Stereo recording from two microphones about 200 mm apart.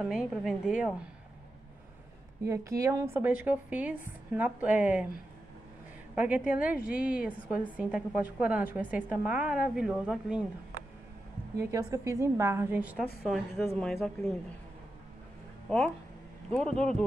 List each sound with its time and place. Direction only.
0.0 s a woman's voice: 5° right (ahead or behind)
2.4 s a woman's voice: 15° right (ahead or behind)
6.1 s a woman's voice: 5° right (ahead or behind)
11.5 s a woman's voice: 15° right (ahead or behind); by 14.3 s centre (ahead or behind)
15.7 s a woman's voice: 5° left (ahead or behind)